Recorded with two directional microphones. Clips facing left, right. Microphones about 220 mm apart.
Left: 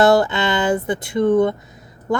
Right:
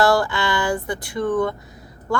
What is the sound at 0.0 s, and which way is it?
A woman's voice, 20° left (ahead or behind).